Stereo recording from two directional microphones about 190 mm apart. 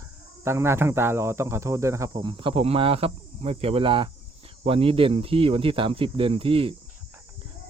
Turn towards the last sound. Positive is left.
turn(degrees=-30)  # may be behind; listen again after turning